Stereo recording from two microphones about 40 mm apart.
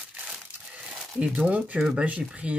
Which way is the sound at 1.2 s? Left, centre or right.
Right.